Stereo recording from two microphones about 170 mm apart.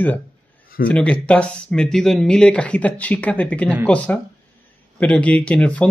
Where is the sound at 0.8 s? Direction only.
5° left (ahead or behind).